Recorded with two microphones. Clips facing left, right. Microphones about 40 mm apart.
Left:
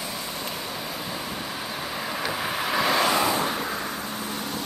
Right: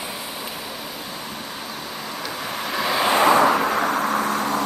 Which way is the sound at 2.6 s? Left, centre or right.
Centre.